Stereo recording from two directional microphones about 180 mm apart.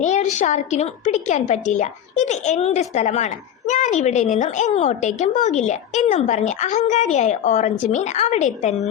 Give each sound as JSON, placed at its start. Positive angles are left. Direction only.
{"t": 0.0, "sound": "a woman's voice", "side_deg": 40}